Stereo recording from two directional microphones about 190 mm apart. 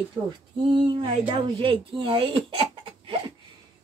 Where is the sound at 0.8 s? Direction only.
25° right (ahead or behind).